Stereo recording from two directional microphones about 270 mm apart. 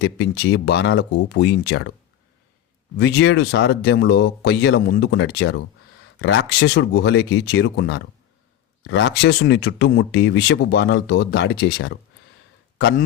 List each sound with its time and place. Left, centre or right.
0.0 s speech: left
3.0 s speech: left